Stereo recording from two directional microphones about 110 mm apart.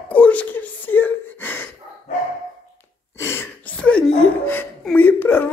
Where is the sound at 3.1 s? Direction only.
20° left (ahead or behind).